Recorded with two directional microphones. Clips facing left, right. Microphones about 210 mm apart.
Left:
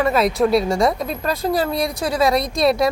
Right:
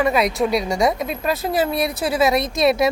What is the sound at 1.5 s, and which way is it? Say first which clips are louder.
Speech: left 1 dB; 20° right (ahead or behind).